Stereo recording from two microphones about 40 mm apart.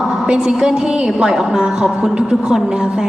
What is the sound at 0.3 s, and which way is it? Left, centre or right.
A woman's voice, centre.